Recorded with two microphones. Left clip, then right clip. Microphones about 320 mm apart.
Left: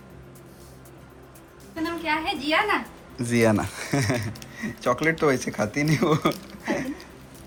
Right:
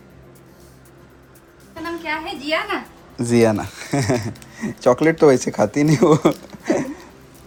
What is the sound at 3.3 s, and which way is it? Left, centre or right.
Speech, centre.